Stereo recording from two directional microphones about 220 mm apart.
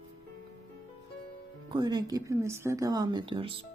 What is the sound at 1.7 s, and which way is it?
Speech, 20° right (ahead or behind).